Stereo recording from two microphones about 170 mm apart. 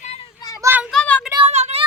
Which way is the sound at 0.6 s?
10° right (ahead or behind).